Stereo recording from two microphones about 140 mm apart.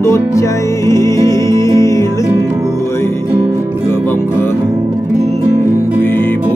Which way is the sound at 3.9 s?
15° left (ahead or behind).